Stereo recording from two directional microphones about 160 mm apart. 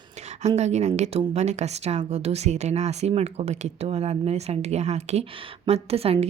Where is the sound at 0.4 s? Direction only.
45° right (ahead or behind).